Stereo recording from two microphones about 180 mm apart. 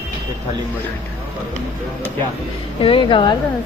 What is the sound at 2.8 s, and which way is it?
Speech, 30° left (ahead or behind).